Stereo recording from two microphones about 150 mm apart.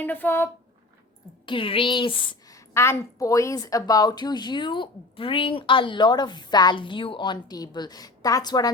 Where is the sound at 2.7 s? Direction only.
15° left (ahead or behind).